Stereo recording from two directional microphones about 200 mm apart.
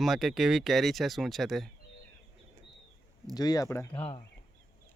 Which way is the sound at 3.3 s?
20° left (ahead or behind).